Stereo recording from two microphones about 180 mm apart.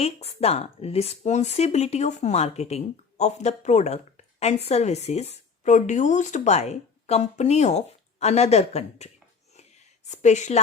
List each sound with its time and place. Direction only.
0.0 s speech: 35° left (ahead or behind)
10.1 s speech: 40° left (ahead or behind)